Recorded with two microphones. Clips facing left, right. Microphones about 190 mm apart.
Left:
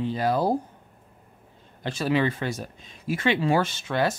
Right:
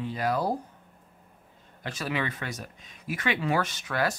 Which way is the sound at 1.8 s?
30° left (ahead or behind).